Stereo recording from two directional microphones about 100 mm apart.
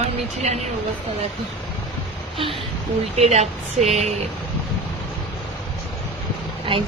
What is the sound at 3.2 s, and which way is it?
Speech, 90° right.